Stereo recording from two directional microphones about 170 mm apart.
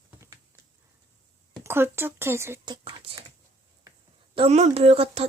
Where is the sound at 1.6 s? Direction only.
15° right (ahead or behind).